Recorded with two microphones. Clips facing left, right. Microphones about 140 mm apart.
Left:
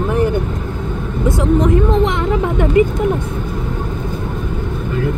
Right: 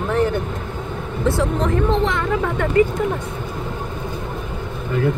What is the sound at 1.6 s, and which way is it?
Vehicle, 15° left (ahead or behind).